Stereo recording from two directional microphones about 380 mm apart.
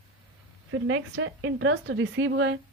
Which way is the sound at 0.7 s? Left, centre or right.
Right.